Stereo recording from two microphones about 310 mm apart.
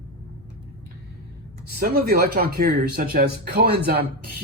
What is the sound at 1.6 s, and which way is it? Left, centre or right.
A man's voice, right.